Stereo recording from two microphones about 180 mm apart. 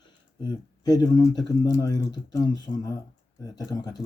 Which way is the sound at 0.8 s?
20° left (ahead or behind).